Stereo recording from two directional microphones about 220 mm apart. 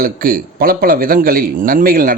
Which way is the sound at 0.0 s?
40° right (ahead or behind).